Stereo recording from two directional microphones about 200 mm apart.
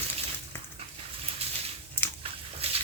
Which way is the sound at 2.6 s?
30° right (ahead or behind).